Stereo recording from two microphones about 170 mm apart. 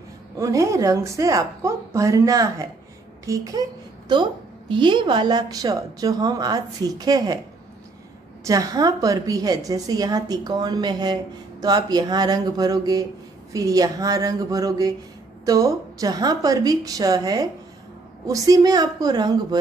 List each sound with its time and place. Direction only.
0.4 s a woman's voice: 20° right (ahead or behind)
8.5 s a woman's voice: 20° right (ahead or behind)